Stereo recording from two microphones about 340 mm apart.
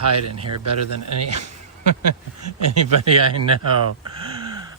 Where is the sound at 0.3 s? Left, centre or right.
Right.